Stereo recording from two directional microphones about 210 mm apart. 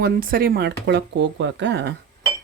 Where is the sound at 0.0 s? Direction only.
45° right (ahead or behind).